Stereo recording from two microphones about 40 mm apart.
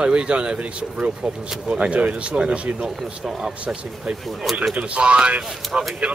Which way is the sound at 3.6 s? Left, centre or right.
Right.